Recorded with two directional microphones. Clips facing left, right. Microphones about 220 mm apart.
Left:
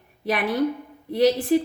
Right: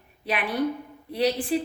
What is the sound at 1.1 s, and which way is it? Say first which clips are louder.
Speech: left 5 dB; 40° left (ahead or behind).